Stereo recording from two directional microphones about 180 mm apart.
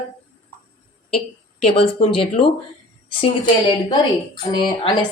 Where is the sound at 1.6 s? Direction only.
30° left (ahead or behind).